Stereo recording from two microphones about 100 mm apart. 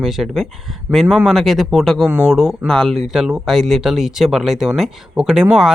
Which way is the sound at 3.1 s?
5° right (ahead or behind).